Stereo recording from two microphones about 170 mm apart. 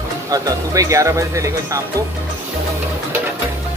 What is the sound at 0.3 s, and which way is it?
Speech, 20° right (ahead or behind).